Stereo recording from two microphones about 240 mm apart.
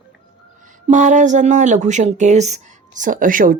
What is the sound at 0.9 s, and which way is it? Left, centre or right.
Speech, right.